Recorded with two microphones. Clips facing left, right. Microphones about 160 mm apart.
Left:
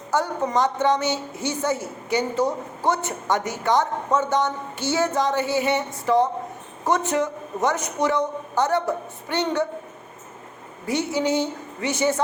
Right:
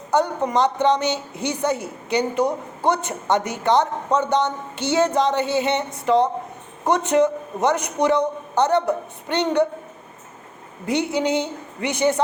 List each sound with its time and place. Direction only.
0.1 s a woman's voice: 20° right (ahead or behind)
10.8 s a woman's voice: 20° right (ahead or behind)